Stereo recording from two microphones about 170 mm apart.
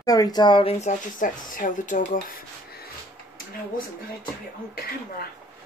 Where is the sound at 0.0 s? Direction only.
20° left (ahead or behind); by 2.8 s 60° left (ahead or behind).